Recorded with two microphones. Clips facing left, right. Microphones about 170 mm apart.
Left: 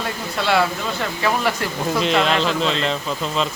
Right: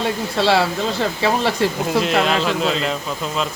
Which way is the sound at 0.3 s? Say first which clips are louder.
Right 3 dB; 30° right (ahead or behind).